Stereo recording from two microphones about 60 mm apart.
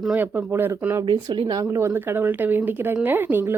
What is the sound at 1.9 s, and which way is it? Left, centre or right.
Speech, right.